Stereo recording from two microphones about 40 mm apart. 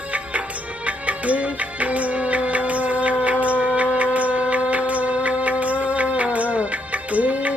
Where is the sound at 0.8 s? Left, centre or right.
Right.